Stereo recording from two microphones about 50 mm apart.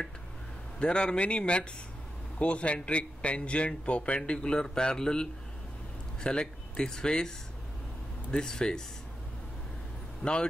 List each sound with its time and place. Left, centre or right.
0.7 s a man's voice: centre